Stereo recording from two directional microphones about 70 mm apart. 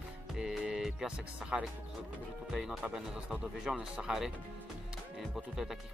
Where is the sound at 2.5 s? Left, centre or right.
Centre.